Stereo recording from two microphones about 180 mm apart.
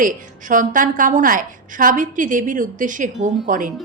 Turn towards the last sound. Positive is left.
turn(degrees=-45)  # may be behind; listen again after turning